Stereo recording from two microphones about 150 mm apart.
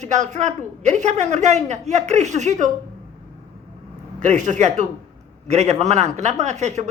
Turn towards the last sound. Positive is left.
turn(degrees=-50)  # may be behind; listen again after turning